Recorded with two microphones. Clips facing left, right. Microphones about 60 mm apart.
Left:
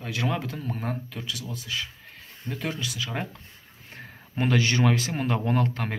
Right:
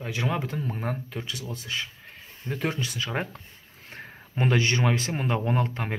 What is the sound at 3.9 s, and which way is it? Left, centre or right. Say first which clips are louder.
Speech: even; right.